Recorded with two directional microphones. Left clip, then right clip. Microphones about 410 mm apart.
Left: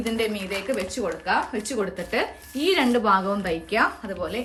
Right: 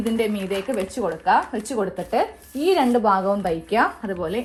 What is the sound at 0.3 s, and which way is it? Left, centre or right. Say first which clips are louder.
Speech: right 2 dB; centre.